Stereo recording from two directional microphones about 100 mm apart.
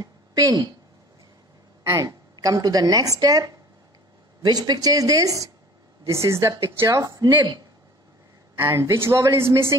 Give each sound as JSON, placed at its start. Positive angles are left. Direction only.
{"t": 0.0, "sound": "a sound", "side_deg": -40}
{"t": 2.0, "sound": "speech", "side_deg": -40}
{"t": 8.5, "sound": "a woman's voice", "side_deg": -25}